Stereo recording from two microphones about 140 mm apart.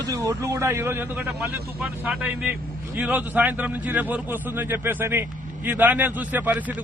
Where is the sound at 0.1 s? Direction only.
25° right (ahead or behind).